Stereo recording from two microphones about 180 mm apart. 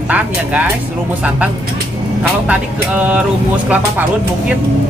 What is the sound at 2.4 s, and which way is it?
Speech, 10° right (ahead or behind).